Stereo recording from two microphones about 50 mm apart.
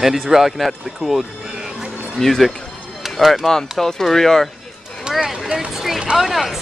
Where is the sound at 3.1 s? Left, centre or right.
Centre.